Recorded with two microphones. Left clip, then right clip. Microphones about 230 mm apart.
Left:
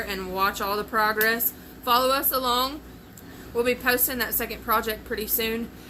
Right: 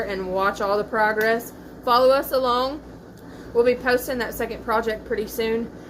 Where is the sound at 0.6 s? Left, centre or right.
Left.